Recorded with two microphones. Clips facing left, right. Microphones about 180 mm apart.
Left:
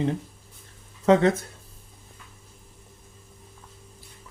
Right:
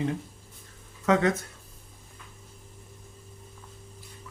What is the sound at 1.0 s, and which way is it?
Speech, 30° left (ahead or behind).